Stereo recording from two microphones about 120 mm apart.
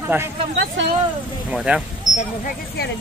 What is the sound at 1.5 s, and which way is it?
Speech, 10° right (ahead or behind).